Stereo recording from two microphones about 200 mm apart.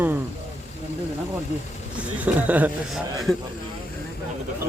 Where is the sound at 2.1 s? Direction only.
10° right (ahead or behind).